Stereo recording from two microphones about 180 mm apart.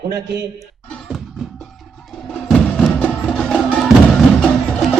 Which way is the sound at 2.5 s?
5° left (ahead or behind).